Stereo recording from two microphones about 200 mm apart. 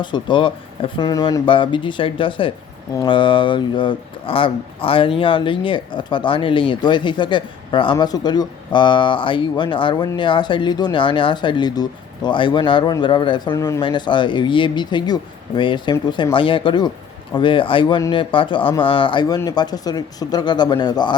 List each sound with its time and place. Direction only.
0.0 s speech: 20° left (ahead or behind)